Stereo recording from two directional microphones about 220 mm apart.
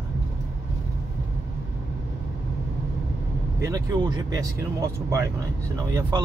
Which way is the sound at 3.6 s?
15° right (ahead or behind).